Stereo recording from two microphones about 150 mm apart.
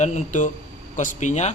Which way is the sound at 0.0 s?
50° left (ahead or behind).